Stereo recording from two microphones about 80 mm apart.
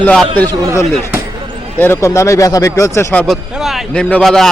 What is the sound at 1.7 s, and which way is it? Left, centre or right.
Speech, left.